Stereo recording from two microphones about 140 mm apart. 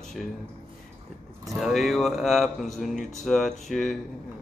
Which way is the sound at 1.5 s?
Centre (ahead or behind).